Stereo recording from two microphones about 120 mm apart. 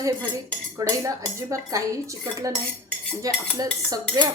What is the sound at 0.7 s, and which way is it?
Speech, 25° right (ahead or behind).